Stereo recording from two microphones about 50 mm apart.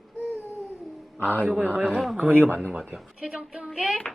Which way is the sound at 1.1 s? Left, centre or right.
Left.